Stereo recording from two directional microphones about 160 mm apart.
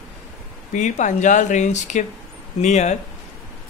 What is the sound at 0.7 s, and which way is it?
Speech, 50° left (ahead or behind).